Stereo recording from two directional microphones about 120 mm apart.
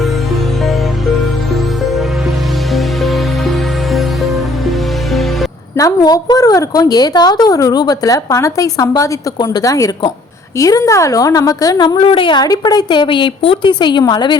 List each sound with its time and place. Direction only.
1.5 s music: centre (ahead or behind)
5.7 s a woman's voice: 30° left (ahead or behind)
11.9 s a woman's voice: 45° left (ahead or behind)